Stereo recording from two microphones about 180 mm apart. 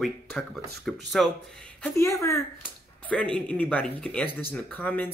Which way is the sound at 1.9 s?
15° left (ahead or behind).